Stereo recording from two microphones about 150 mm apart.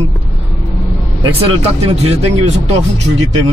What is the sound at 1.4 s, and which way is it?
Speech, 40° right (ahead or behind).